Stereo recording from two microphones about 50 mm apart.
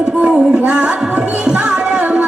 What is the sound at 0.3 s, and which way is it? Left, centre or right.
Music, right.